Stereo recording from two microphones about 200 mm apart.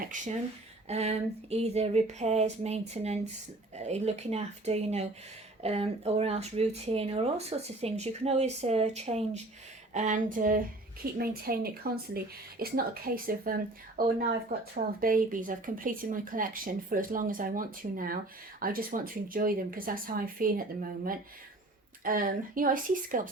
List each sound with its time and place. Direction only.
0.0 s speech: 40° right (ahead or behind)
22.0 s speech: 45° right (ahead or behind)